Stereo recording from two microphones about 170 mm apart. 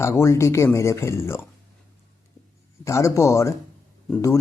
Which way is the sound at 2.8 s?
15° left (ahead or behind).